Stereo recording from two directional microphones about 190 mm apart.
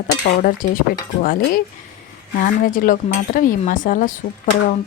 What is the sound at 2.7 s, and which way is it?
A woman's voice, 45° left (ahead or behind).